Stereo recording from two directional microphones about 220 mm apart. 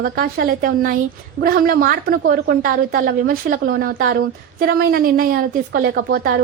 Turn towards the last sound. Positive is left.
turn(degrees=-40)  # may be behind; listen again after turning